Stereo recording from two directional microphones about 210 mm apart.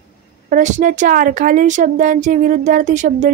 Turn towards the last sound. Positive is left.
turn(degrees=-35)  # may be behind; listen again after turning